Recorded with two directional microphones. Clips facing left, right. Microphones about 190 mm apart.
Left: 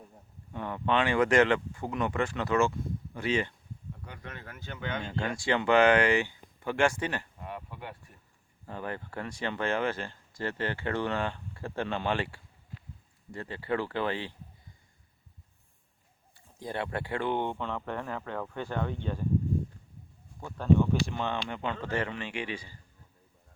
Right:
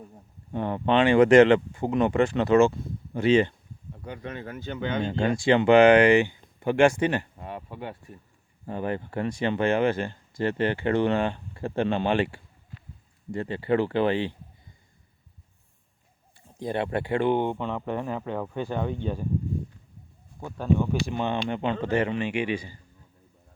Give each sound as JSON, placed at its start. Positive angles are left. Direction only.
{"t": 0.5, "sound": "speech", "side_deg": -30}
{"t": 16.6, "sound": "speech", "side_deg": -20}
{"t": 20.4, "sound": "speech", "side_deg": -10}